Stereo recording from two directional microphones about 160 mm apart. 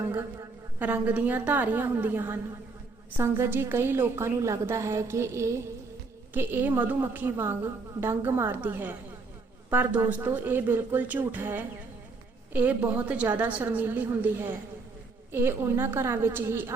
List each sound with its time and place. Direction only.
0.1 s a woman's voice: 15° right (ahead or behind)